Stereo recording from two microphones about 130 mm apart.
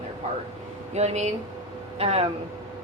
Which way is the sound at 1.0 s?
60° right (ahead or behind).